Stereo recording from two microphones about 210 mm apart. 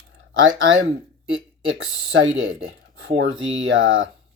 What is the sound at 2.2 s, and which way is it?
Speech, 65° right (ahead or behind).